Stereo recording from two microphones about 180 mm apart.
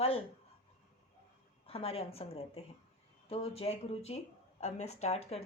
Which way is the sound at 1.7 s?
35° left (ahead or behind).